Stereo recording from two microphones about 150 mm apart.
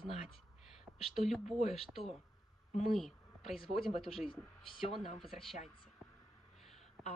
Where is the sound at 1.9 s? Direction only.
Centre (ahead or behind).